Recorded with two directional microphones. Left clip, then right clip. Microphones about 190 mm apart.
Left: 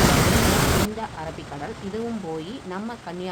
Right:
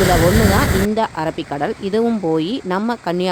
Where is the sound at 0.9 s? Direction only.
65° right (ahead or behind).